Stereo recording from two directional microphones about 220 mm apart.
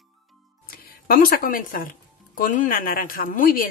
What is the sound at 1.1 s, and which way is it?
A woman's voice, 40° left (ahead or behind).